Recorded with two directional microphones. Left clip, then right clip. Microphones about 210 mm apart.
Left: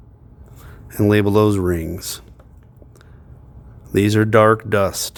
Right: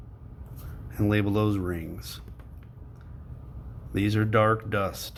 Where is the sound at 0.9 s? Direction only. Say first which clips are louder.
Left 11 dB; 55° left (ahead or behind).